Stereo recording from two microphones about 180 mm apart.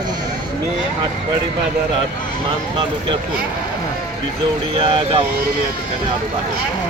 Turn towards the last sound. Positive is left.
turn(degrees=-30)  # may be behind; listen again after turning